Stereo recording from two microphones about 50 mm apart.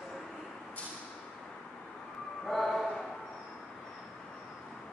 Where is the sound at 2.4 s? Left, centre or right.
Centre.